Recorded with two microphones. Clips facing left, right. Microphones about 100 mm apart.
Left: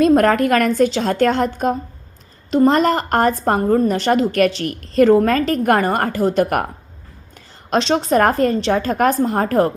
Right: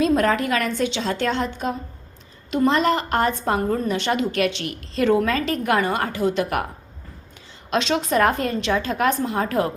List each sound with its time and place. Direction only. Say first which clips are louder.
0.0 s a woman's voice: left 6 dB; 50° left (ahead or behind)
7.7 s a woman's voice: left 5 dB; 35° left (ahead or behind)